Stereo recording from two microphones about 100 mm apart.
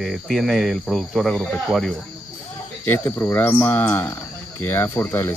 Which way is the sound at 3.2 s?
20° left (ahead or behind).